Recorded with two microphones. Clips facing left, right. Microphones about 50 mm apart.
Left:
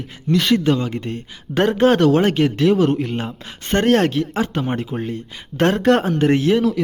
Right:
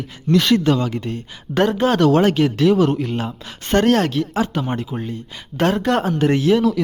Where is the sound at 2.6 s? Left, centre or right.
Centre.